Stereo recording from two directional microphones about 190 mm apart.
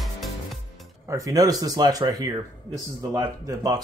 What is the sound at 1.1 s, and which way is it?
Speech, 20° right (ahead or behind).